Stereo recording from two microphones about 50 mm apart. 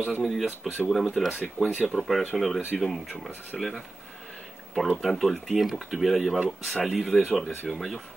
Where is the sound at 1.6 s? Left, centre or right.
Right.